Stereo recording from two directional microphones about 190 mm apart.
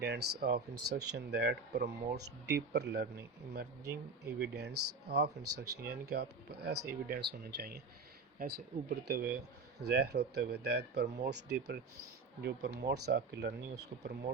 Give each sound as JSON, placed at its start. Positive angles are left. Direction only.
{"t": 0.0, "sound": "speech", "side_deg": -60}
{"t": 9.0, "sound": "speech", "side_deg": -60}